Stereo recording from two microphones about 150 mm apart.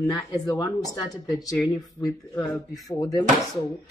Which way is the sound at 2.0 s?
20° left (ahead or behind).